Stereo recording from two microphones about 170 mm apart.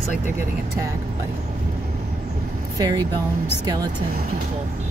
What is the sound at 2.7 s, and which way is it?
Speech, 20° right (ahead or behind).